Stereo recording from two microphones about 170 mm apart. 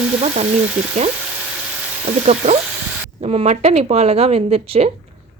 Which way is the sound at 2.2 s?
40° right (ahead or behind).